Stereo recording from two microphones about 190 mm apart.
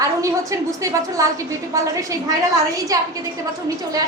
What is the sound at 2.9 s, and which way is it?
Speech, 20° right (ahead or behind).